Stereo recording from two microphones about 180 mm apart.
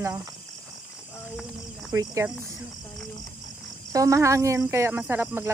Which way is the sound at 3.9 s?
15° right (ahead or behind).